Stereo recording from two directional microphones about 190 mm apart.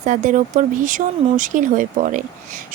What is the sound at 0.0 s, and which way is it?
Speech, 40° right (ahead or behind).